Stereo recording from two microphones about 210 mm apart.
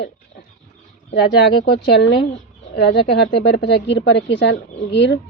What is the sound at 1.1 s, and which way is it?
Speech, 50° left (ahead or behind).